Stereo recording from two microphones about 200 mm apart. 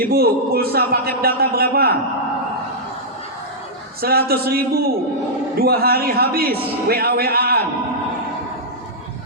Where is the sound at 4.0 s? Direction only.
50° right (ahead or behind).